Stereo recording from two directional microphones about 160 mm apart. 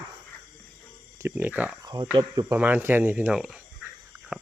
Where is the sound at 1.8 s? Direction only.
25° right (ahead or behind).